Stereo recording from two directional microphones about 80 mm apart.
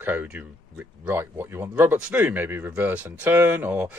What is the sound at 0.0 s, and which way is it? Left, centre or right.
Speech, right.